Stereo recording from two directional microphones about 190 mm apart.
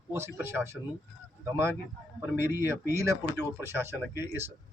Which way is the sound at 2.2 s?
10° right (ahead or behind).